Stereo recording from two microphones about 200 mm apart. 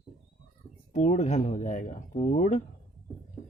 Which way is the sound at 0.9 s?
35° left (ahead or behind).